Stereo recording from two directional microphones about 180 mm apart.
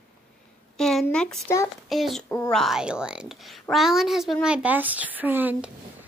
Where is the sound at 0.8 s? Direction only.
5° left (ahead or behind).